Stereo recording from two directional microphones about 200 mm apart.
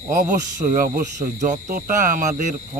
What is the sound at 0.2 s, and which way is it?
Speech, 40° right (ahead or behind).